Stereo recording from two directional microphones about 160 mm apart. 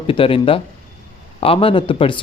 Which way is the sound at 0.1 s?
35° left (ahead or behind).